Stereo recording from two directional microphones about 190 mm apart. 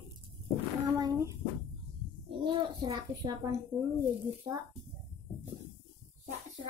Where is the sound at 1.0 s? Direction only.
15° right (ahead or behind).